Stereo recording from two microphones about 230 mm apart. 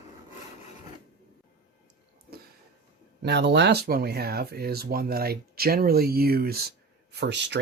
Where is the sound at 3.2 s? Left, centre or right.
Right.